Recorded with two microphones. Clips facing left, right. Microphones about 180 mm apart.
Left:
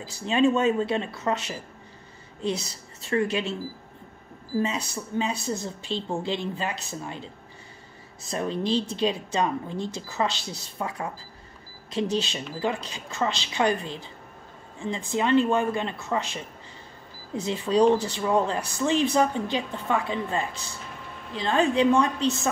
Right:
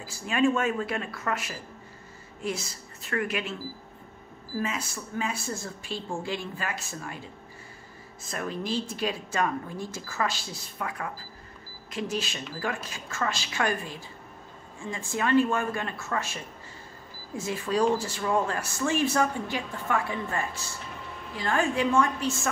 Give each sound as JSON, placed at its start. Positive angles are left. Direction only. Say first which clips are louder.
{"t": 0.0, "sound": "a woman's voice", "louder": "left 3 dB", "side_deg": 20}
{"t": 3.1, "sound": "a woman's voice", "louder": "left 5 dB", "side_deg": 25}
{"t": 4.6, "sound": "a woman's voice", "louder": "left 5 dB", "side_deg": 25}
{"t": 8.3, "sound": "a woman's voice", "louder": "left 5 dB", "side_deg": 25}